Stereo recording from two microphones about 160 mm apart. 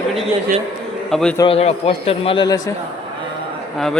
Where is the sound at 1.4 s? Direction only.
40° left (ahead or behind).